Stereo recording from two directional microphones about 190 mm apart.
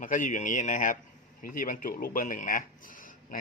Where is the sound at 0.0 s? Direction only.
45° left (ahead or behind).